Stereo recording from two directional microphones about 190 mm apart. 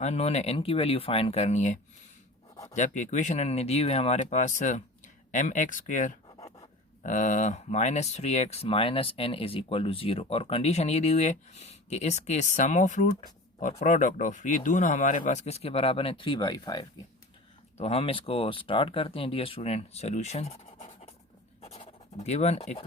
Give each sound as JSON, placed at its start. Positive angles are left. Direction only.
{"t": 0.0, "sound": "speech", "side_deg": 35}
{"t": 17.7, "sound": "speech", "side_deg": 30}
{"t": 21.6, "sound": "scratch", "side_deg": 35}